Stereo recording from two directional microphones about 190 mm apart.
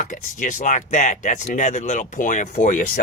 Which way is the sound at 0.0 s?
40° left (ahead or behind).